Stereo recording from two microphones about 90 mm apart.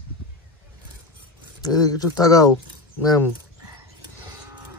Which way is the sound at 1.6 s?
45° left (ahead or behind).